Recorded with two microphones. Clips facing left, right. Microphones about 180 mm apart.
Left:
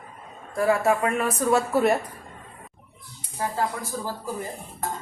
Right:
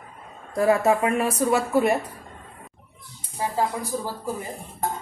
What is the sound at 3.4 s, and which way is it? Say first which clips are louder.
Speech: right 1 dB; 15° right (ahead or behind).